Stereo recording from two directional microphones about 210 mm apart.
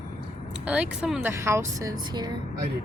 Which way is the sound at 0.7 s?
5° right (ahead or behind).